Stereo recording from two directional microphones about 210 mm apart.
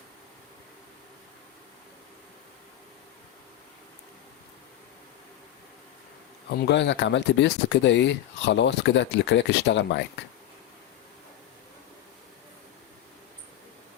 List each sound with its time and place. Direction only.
6.5 s speech: 50° left (ahead or behind)